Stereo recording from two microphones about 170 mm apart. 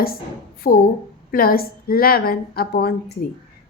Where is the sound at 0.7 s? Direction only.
55° left (ahead or behind).